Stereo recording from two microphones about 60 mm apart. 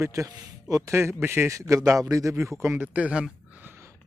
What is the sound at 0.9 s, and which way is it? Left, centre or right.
Speech, right.